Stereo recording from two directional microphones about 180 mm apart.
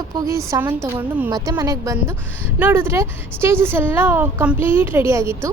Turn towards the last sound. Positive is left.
turn(degrees=-15)  # may be behind; listen again after turning